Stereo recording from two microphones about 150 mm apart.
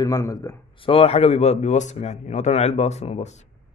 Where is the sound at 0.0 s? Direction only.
25° left (ahead or behind).